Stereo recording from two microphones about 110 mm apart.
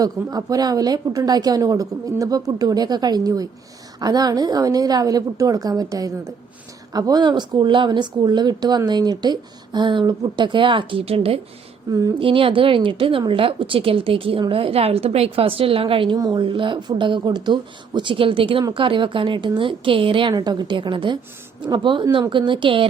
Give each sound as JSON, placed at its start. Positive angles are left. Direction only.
{"t": 0.0, "sound": "a woman's voice", "side_deg": -35}
{"t": 11.9, "sound": "a woman's voice", "side_deg": -30}
{"t": 12.2, "sound": "a woman's voice", "side_deg": -55}
{"t": 16.1, "sound": "a woman's voice", "side_deg": -35}
{"t": 16.4, "sound": "speech", "side_deg": -50}
{"t": 20.3, "sound": "speech", "side_deg": -40}